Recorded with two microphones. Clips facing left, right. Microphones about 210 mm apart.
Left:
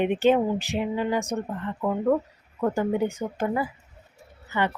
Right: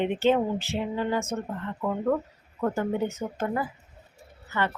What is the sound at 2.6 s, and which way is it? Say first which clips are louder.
Speech: left 3 dB; 15° left (ahead or behind).